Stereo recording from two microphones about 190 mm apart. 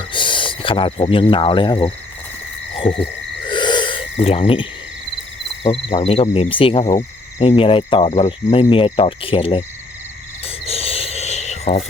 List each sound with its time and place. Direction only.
0.1 s cricket: 25° left (ahead or behind)
3.5 s snort: 25° left (ahead or behind)
5.6 s speech: 30° left (ahead or behind)
7.3 s cricket: 30° left (ahead or behind)